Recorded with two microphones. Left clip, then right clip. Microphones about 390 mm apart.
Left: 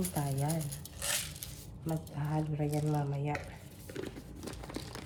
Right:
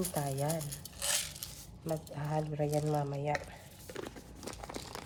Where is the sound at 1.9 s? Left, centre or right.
Right.